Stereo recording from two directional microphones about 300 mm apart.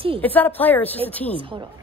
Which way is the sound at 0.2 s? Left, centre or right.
Centre.